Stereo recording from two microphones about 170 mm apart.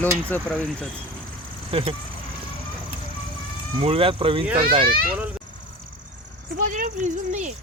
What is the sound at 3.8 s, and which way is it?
Speech, 35° right (ahead or behind).